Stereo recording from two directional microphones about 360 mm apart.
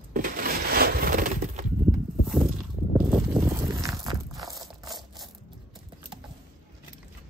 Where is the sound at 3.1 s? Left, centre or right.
Centre.